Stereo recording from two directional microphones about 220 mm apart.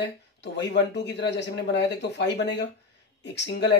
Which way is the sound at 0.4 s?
50° left (ahead or behind).